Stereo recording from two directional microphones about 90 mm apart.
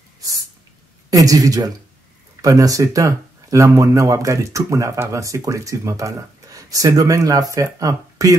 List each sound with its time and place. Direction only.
1.1 s speech: 40° right (ahead or behind)